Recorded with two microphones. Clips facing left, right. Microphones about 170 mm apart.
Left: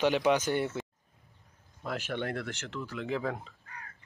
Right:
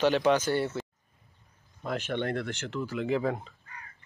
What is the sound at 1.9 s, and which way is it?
Speech, 5° left (ahead or behind).